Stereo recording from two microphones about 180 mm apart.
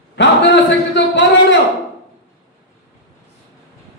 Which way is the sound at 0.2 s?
80° left.